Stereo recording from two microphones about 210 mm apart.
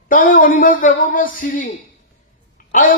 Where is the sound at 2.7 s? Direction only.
40° left (ahead or behind).